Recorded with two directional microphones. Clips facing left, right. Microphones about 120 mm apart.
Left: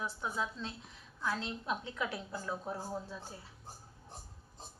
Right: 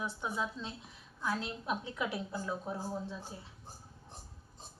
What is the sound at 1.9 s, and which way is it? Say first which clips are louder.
A woman's voice: right 2 dB; 10° right (ahead or behind).